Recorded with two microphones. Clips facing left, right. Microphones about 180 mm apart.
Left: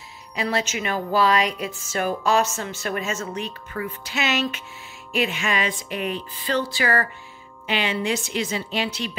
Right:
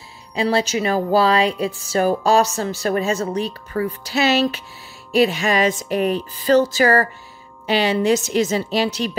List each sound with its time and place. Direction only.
0.3 s a woman's voice: 30° right (ahead or behind)